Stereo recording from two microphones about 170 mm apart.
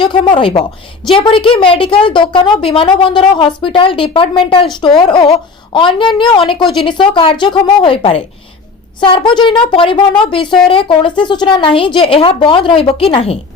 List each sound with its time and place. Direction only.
0.0 s a woman's voice: 30° left (ahead or behind)